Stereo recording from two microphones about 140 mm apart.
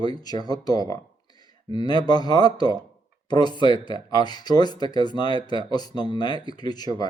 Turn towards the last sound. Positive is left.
turn(degrees=30)  # may be behind; listen again after turning